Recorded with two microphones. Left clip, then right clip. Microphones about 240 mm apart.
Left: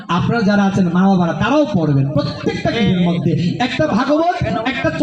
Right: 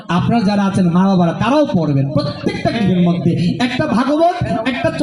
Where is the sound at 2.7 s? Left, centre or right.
Left.